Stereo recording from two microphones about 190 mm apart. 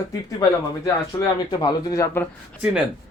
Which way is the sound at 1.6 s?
15° left (ahead or behind).